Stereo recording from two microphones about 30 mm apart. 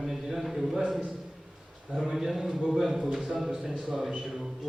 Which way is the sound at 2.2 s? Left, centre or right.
Centre.